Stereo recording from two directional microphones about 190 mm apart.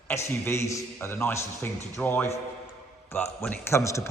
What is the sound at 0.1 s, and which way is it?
A man's voice, 10° left (ahead or behind).